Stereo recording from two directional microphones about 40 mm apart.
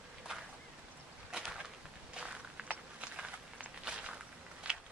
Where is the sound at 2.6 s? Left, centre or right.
Right.